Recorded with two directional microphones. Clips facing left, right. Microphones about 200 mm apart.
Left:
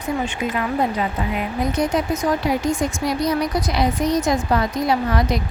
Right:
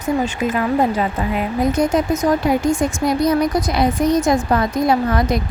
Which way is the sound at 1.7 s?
45° right (ahead or behind).